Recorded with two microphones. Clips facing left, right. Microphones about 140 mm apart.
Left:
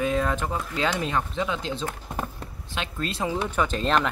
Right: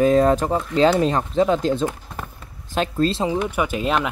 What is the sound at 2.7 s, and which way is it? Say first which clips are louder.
Speech: right 11 dB; 35° right (ahead or behind).